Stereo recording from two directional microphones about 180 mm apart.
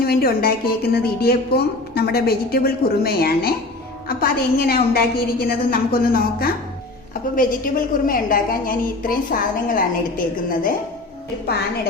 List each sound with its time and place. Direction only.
0.0 s a woman's voice: 60° left (ahead or behind)